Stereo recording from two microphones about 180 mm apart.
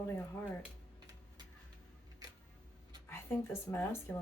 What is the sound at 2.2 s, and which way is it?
Camera, 20° right (ahead or behind).